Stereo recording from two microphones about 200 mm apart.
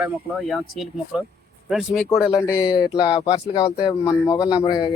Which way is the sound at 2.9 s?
20° left (ahead or behind).